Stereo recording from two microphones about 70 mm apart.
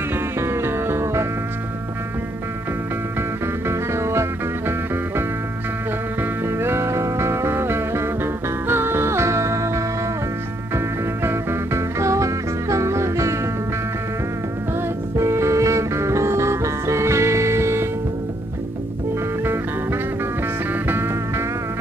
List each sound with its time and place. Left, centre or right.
0.4 s music: right
3.6 s music: right
6.4 s music: right
11.2 s music: right
15.1 s music: right
19.4 s music: right